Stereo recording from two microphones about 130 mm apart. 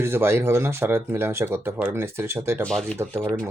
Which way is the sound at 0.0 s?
20° right (ahead or behind).